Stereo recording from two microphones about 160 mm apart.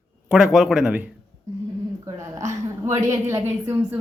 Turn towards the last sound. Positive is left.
turn(degrees=-15)  # may be behind; listen again after turning